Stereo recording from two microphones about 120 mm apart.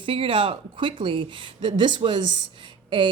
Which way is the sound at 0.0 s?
45° right (ahead or behind).